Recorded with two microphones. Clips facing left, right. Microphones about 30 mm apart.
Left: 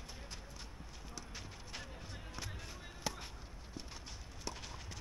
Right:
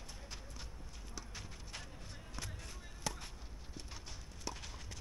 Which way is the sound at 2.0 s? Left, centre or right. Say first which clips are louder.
Left 1 dB; centre.